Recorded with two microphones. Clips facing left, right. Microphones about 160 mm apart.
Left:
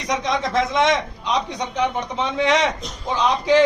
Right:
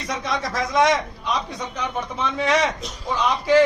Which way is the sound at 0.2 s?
25° left (ahead or behind).